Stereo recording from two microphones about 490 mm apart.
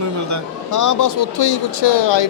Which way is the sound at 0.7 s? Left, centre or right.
Left.